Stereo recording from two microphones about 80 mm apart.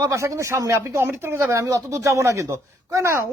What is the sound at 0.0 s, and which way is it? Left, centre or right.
Speech, right.